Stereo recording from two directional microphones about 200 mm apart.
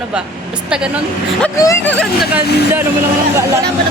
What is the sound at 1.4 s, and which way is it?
Speech, 15° left (ahead or behind).